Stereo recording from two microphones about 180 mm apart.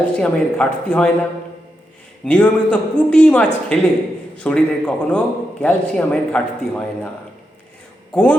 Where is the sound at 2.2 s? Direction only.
5° left (ahead or behind).